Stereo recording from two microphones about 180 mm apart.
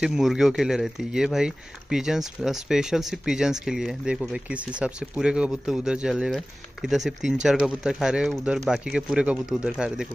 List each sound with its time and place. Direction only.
0.0 s speech: centre (ahead or behind)